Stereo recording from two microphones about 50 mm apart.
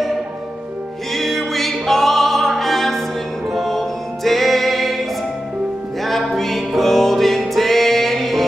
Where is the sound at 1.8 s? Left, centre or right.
Centre.